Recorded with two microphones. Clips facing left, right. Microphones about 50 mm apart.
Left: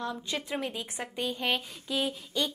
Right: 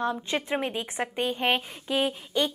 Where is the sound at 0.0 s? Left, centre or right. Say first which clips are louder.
Right 6 dB; right.